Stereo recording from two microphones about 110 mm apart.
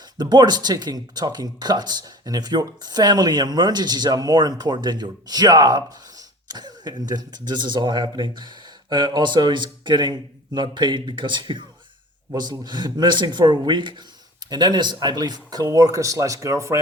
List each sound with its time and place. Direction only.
0.2 s speech: 40° right (ahead or behind)